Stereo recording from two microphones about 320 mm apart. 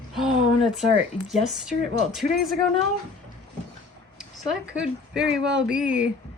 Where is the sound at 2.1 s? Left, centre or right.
Centre.